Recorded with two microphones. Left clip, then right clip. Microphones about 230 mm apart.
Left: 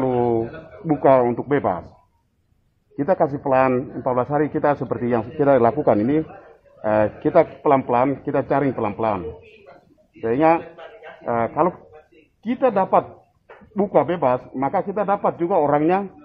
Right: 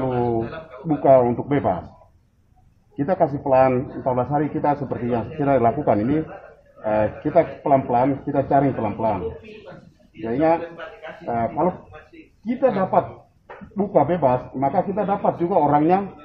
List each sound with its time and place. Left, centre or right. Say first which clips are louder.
0.0 s a sound: left 3 dB; left
0.8 s a man's voice: even; left
3.0 s a man's voice: left 1 dB; left
10.2 s a man's voice: left 2 dB; left